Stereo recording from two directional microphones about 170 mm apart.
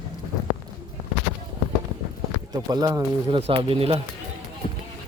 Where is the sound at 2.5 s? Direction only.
20° right (ahead or behind).